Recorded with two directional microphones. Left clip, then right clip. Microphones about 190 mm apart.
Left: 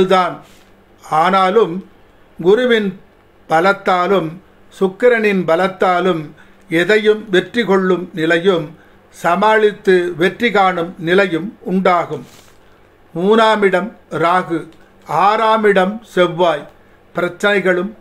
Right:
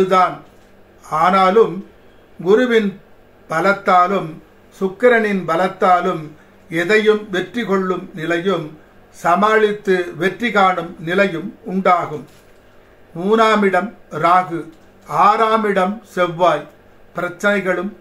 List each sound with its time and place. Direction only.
1.0 s a man's voice: 55° left (ahead or behind)
13.1 s a man's voice: 55° left (ahead or behind)